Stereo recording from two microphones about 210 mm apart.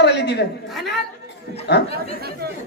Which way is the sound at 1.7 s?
55° left (ahead or behind).